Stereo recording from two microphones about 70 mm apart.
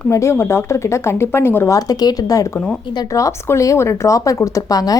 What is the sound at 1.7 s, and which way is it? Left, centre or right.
Speech, left.